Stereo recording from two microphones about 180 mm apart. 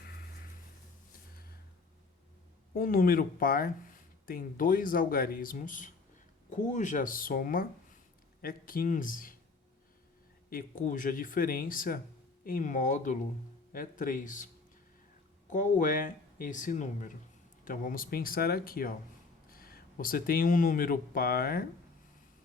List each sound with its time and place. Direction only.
0.0 s a sound: 60° left (ahead or behind)
2.7 s speech: 50° left (ahead or behind)
10.5 s speech: 50° left (ahead or behind)
15.4 s speech: 45° left (ahead or behind)